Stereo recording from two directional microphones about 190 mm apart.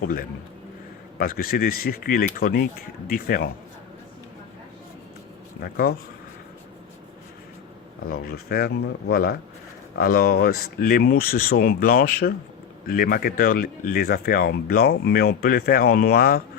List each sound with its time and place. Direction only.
0.0 s speech: 50° left (ahead or behind)
8.0 s speech: 55° left (ahead or behind)